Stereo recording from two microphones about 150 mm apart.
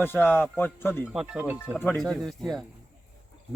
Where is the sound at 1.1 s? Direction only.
5° right (ahead or behind).